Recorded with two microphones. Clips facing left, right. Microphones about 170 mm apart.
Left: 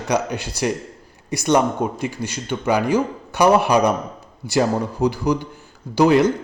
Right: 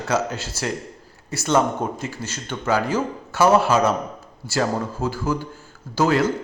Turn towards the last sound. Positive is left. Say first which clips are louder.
# left 5 dB
turn(degrees=20)  # may be behind; listen again after turning